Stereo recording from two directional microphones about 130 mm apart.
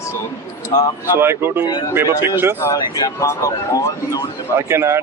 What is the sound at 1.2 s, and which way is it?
Speech, 20° right (ahead or behind).